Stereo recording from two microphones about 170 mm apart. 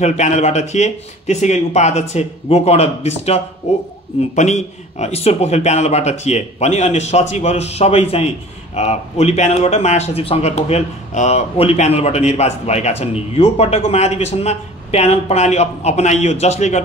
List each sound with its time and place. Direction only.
0.0 s speech: 40° left (ahead or behind)